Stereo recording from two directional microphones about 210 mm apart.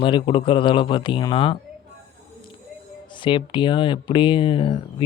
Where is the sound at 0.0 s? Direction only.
25° left (ahead or behind).